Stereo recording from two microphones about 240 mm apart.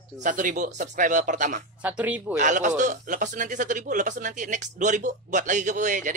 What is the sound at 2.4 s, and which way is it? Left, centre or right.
Speech, right.